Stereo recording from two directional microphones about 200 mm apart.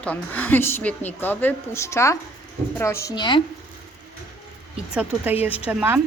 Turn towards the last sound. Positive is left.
turn(degrees=-10)  # may be behind; listen again after turning